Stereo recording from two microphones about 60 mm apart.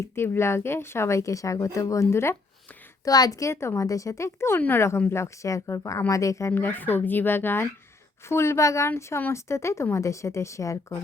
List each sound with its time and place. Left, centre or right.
0.0 s speech: left
3.0 s a woman's voice: left
3.5 s speech: left
3.8 s speech: left
6.5 s speech: left
8.3 s speech: left